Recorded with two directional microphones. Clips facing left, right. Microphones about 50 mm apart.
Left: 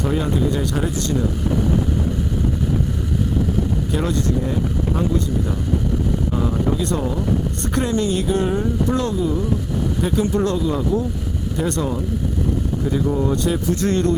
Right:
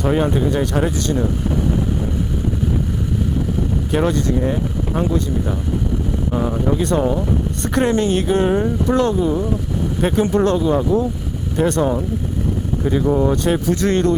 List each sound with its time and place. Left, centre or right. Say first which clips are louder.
0.0 s speech: right 3 dB; right
3.9 s speech: right 5 dB; right
6.3 s speech: right 5 dB; right
8.4 s speech: right 3 dB; right
12.8 s speech: right 5 dB; right